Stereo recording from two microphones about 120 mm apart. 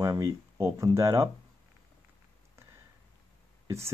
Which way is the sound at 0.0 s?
30° right (ahead or behind).